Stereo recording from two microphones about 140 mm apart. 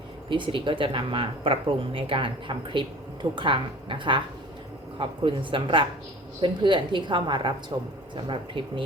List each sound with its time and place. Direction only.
0.3 s speech: 35° right (ahead or behind)